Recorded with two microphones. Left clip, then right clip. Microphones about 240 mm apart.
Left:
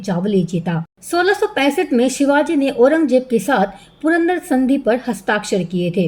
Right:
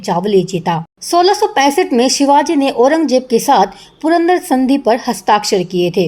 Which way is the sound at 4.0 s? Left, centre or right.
Right.